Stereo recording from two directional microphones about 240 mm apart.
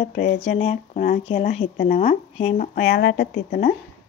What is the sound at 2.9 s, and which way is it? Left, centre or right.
Speech, left.